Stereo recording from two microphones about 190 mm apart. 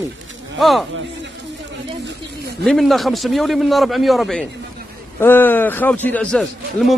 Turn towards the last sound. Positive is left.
turn(degrees=5)  # may be behind; listen again after turning